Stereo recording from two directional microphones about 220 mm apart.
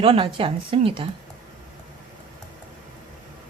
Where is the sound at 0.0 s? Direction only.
25° right (ahead or behind).